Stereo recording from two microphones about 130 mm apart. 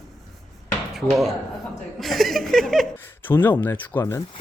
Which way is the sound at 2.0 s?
Centre (ahead or behind).